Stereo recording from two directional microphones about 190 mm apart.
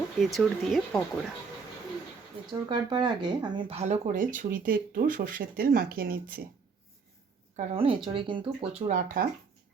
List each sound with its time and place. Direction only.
0.2 s speech: centre (ahead or behind)
2.5 s speech: 25° right (ahead or behind); by 6.1 s 50° right (ahead or behind)
7.5 s speech: 35° right (ahead or behind)